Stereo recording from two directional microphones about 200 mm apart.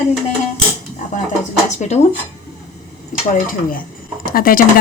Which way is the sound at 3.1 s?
40° left (ahead or behind).